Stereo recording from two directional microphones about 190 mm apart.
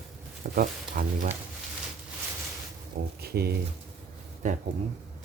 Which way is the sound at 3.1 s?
55° right (ahead or behind).